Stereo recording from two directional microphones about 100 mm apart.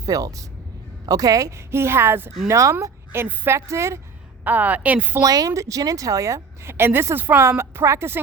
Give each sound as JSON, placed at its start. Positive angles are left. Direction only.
{"t": 0.0, "sound": "a woman's voice", "side_deg": -35}
{"t": 4.4, "sound": "a woman's voice", "side_deg": -15}
{"t": 5.2, "sound": "a woman's voice", "side_deg": -35}